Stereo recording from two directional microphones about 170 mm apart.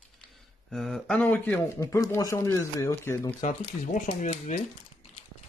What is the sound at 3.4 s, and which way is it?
Speech, 45° left (ahead or behind).